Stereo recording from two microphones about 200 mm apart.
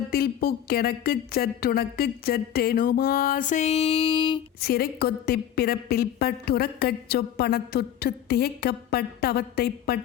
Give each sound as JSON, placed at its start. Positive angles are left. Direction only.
{"t": 0.1, "sound": "a woman's voice", "side_deg": 50}
{"t": 4.6, "sound": "a woman's voice", "side_deg": 50}